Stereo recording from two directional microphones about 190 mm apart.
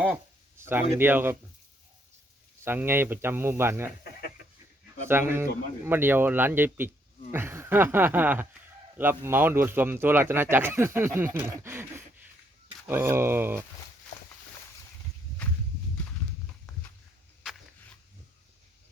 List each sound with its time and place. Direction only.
0.6 s a man's voice: 10° right (ahead or behind)
2.6 s a man's voice: 10° right (ahead or behind)
5.0 s a man's voice: 10° right (ahead or behind)